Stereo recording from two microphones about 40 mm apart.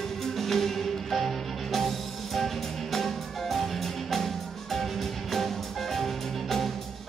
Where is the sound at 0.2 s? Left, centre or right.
Centre.